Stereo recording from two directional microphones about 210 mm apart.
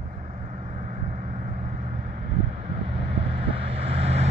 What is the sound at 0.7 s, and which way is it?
Vehicle, 35° right (ahead or behind).